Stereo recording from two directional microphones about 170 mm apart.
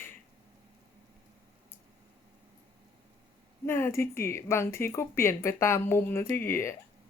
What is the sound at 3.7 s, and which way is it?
Speech, 15° left (ahead or behind).